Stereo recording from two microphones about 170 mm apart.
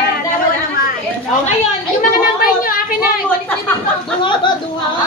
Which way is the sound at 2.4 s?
60° left (ahead or behind).